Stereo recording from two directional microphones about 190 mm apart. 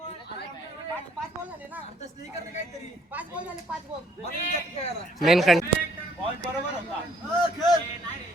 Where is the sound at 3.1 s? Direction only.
5° right (ahead or behind).